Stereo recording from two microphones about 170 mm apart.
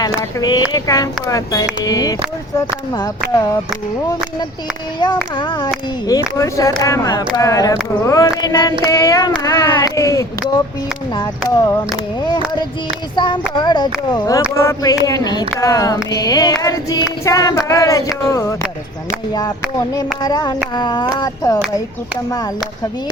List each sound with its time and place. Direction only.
0.0 s speech: 25° left (ahead or behind)
4.9 s speech: 25° left (ahead or behind)